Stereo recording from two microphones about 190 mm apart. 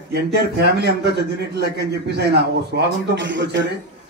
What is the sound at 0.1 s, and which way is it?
A man's voice, 60° right (ahead or behind).